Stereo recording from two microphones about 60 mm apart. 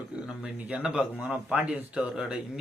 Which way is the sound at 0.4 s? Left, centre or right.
Centre.